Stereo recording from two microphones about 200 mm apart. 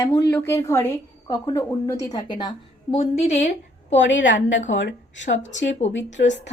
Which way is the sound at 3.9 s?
65° left (ahead or behind).